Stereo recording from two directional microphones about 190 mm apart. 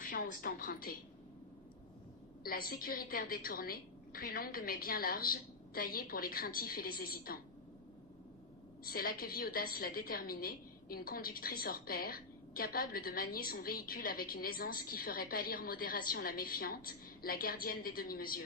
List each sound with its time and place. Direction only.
0.0 s a woman's voice: 50° left (ahead or behind)
2.4 s a woman's voice: 50° left (ahead or behind)
8.8 s a woman's voice: 50° left (ahead or behind)